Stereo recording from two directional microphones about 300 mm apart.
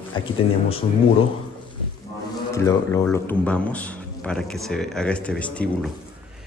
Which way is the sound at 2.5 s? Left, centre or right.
Centre.